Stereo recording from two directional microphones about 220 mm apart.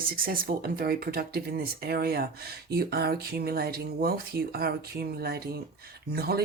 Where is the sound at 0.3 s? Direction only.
40° right (ahead or behind).